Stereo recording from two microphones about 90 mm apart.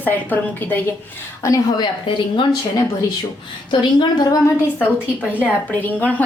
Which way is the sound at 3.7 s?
60° left (ahead or behind).